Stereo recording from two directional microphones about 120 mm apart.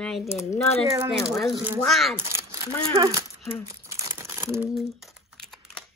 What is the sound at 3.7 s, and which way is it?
Crumpling, 25° right (ahead or behind).